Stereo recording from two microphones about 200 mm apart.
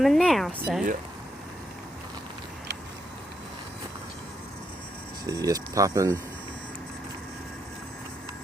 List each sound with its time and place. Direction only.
0.0 s speech: centre (ahead or behind)
5.2 s speech: 15° right (ahead or behind)